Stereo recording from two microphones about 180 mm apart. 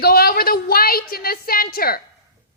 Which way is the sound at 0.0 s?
60° left (ahead or behind).